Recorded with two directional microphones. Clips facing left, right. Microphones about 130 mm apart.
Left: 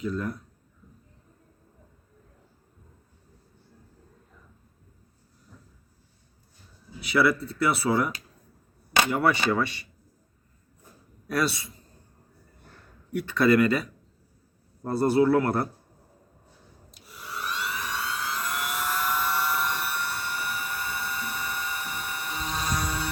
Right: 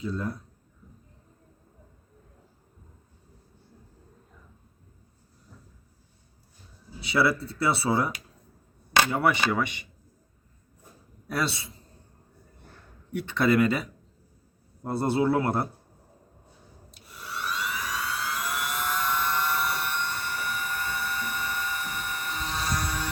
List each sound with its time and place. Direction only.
0.0 s speech: 25° right (ahead or behind)
7.0 s speech: 30° right (ahead or behind)
11.3 s speech: 25° right (ahead or behind)
13.1 s speech: 25° right (ahead or behind)
16.9 s a sound: centre (ahead or behind)
18.0 s vehicle: 5° right (ahead or behind); by 23.0 s 10° left (ahead or behind)